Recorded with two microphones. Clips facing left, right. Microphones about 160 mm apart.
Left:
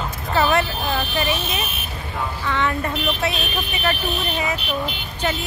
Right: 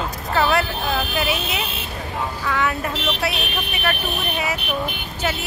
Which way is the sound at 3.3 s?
65° right (ahead or behind).